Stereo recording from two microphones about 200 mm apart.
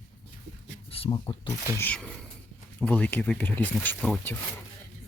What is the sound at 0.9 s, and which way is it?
Speech, 30° left (ahead or behind).